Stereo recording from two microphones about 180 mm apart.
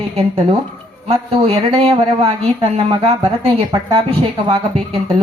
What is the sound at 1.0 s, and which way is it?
Speech, 35° right (ahead or behind).